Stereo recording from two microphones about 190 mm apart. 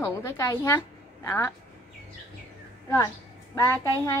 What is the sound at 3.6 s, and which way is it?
Speech, 15° left (ahead or behind).